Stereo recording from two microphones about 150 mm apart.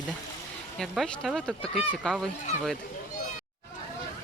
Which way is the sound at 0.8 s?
Centre (ahead or behind).